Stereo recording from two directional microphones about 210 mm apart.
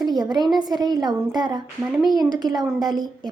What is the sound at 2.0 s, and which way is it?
Speech, centre (ahead or behind).